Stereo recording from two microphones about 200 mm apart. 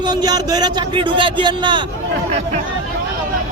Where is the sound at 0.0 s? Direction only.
20° right (ahead or behind).